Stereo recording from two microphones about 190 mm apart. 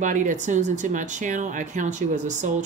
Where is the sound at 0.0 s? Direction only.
40° right (ahead or behind).